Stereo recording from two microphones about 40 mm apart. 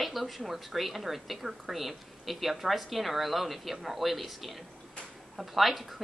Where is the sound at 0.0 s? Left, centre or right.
Centre.